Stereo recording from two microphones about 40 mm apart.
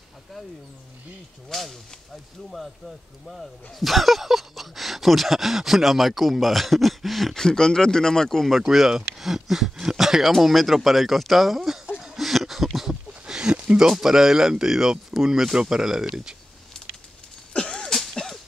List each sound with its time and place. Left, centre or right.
1.5 s speech: centre
3.3 s speech: centre
7.3 s speech: centre
8.6 s speech: centre
12.0 s a sound: centre
13.7 s speech: centre
17.5 s cough: left
18.1 s a sound: centre